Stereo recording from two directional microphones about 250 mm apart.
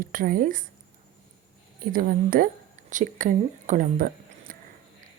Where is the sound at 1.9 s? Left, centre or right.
Right.